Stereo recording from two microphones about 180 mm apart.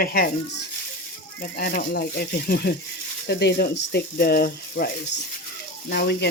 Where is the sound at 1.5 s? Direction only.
55° left (ahead or behind).